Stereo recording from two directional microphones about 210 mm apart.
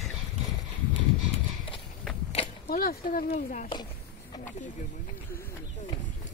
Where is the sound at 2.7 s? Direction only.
45° left (ahead or behind).